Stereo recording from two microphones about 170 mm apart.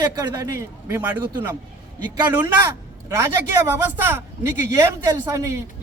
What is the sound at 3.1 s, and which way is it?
A man's voice, 15° right (ahead or behind).